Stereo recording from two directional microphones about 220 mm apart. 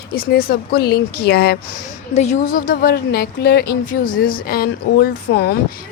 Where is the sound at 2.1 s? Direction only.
30° left (ahead or behind); by 5.6 s 45° left (ahead or behind).